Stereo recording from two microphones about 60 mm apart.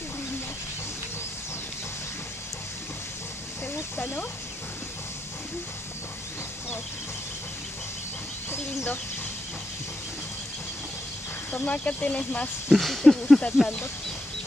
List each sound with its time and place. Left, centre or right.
11.5 s speech: left
12.6 s speech: centre